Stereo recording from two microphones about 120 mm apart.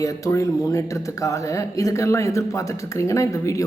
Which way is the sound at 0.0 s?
25° left (ahead or behind).